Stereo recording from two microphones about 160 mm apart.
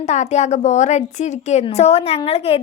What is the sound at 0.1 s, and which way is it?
A woman's voice, 45° left (ahead or behind).